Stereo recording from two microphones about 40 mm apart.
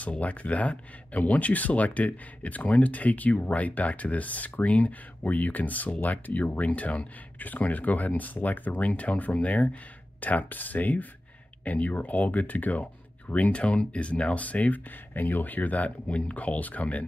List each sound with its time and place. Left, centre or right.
0.0 s speech: left